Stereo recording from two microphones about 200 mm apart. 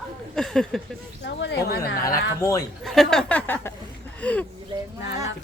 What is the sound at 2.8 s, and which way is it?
Speech, centre (ahead or behind).